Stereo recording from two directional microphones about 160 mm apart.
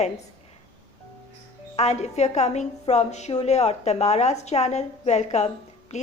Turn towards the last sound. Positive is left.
turn(degrees=45)  # may be behind; listen again after turning